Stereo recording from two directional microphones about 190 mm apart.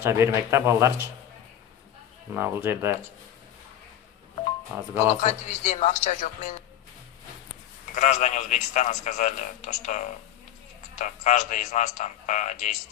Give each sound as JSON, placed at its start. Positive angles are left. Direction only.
{"t": 0.0, "sound": "speech", "side_deg": -15}
{"t": 2.3, "sound": "speech", "side_deg": -10}
{"t": 5.2, "sound": "a man's voice", "side_deg": 35}
{"t": 7.9, "sound": "a man's voice", "side_deg": 40}